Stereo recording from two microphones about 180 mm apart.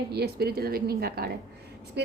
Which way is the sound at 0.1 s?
60° right (ahead or behind).